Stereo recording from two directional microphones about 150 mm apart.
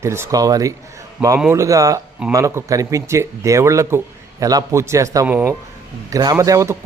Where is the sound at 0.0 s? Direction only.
20° right (ahead or behind).